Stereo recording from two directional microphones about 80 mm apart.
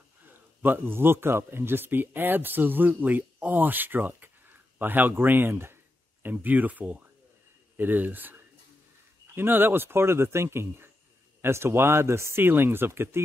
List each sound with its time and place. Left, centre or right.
0.3 s a man's voice: right